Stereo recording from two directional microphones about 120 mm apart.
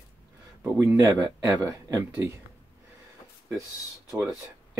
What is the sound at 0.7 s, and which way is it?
Speech, 25° right (ahead or behind).